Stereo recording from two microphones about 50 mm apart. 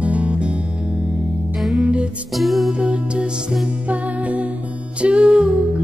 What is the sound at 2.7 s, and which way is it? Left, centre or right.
Music, right.